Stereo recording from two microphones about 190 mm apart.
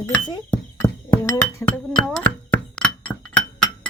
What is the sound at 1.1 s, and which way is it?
Music, 15° left (ahead or behind).